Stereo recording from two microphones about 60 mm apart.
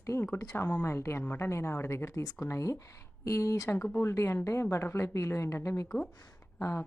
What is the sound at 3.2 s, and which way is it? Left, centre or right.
Speech, left.